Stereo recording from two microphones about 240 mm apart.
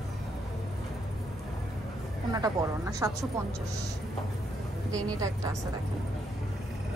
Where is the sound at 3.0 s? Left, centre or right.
Centre.